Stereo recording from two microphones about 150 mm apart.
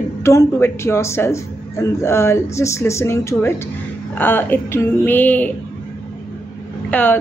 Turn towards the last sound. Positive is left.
turn(degrees=10)  # may be behind; listen again after turning